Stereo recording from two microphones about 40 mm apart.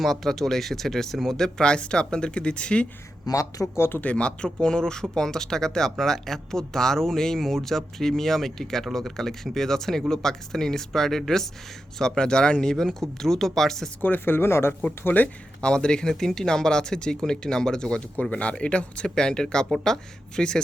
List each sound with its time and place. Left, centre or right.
0.0 s speech: centre
1.6 s speech: left
3.8 s speech: left
4.0 s speech: left
12.7 s speech: centre
14.0 s speech: left
15.0 s speech: left
15.6 s speech: left
18.2 s speech: left
19.0 s speech: centre